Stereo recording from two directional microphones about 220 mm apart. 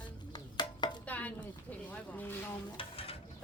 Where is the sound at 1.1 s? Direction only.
5° left (ahead or behind).